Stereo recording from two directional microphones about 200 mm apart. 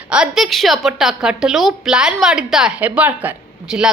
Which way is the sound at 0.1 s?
5° right (ahead or behind).